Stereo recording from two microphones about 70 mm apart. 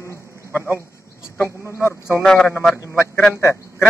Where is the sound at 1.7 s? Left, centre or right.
Left.